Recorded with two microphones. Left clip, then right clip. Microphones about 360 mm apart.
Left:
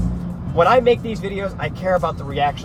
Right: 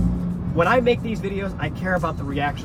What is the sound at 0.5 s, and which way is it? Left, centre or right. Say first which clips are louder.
Speech: left 4 dB; left.